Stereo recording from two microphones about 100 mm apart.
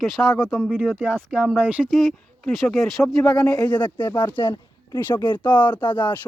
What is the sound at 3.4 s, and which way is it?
Speech, 35° left (ahead or behind).